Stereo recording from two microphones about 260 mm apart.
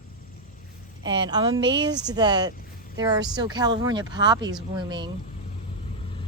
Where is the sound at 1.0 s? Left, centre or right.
Centre.